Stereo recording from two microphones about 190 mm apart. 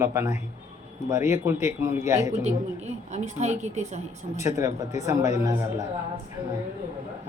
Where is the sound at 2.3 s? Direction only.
35° right (ahead or behind).